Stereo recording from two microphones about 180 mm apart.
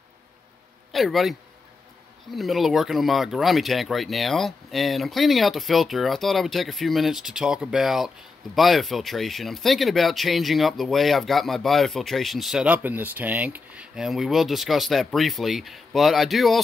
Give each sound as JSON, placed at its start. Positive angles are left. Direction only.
{"t": 0.9, "sound": "speech", "side_deg": 0}
{"t": 2.3, "sound": "speech", "side_deg": 0}